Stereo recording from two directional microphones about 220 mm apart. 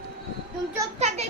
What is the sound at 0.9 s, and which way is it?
Speech, 30° right (ahead or behind).